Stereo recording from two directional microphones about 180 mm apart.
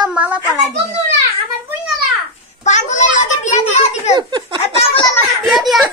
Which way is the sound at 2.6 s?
40° left (ahead or behind).